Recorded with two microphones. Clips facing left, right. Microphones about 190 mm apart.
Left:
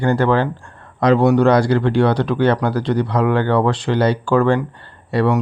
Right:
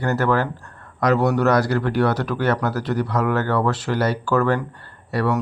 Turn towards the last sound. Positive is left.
turn(degrees=25)  # may be behind; listen again after turning